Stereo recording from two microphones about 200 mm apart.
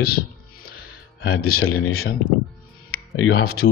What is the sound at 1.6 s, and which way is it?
Speech, 90° left.